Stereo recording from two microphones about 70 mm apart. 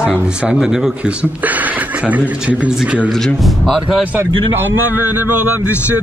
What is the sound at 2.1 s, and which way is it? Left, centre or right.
A man's voice, centre.